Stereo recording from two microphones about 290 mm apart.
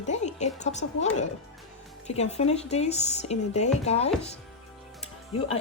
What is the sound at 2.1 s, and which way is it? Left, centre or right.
A woman's voice, left.